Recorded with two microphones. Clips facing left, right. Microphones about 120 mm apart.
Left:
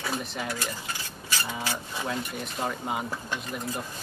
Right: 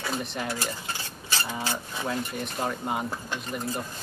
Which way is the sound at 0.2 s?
Centre (ahead or behind).